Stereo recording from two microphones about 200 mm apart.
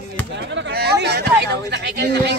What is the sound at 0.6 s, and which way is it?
Speech, 55° right (ahead or behind).